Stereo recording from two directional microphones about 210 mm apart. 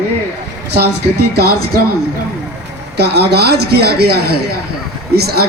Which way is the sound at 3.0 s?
50° right (ahead or behind).